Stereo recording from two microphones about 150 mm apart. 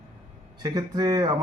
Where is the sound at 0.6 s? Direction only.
25° right (ahead or behind).